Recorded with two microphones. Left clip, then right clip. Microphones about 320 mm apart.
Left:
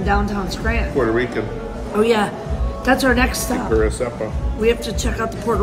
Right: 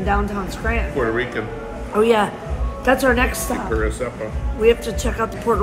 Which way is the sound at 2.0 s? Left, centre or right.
Centre.